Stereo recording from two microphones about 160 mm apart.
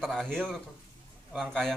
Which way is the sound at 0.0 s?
5° left (ahead or behind).